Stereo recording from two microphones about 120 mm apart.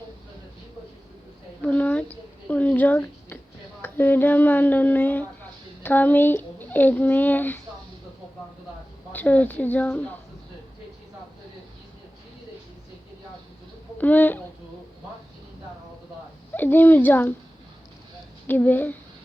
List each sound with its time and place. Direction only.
1.6 s a sound: 10° left (ahead or behind)
3.8 s a woman's voice: 15° left (ahead or behind)
9.1 s a woman's voice: 10° left (ahead or behind)
14.0 s a woman's voice: 15° left (ahead or behind)
16.6 s a woman's voice: 15° left (ahead or behind)
18.4 s a woman's voice: 15° left (ahead or behind)